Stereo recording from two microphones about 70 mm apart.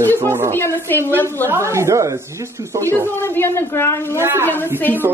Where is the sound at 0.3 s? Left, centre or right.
Right.